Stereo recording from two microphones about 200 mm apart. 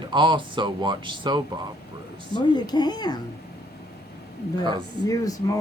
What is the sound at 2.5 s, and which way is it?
Speech, 20° left (ahead or behind).